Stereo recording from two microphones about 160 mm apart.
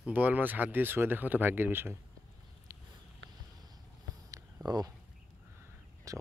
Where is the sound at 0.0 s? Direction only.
10° right (ahead or behind).